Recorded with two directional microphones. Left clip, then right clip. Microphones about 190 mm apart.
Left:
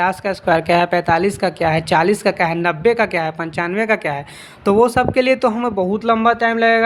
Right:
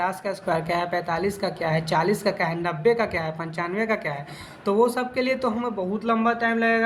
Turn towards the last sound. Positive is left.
turn(degrees=50)  # may be behind; listen again after turning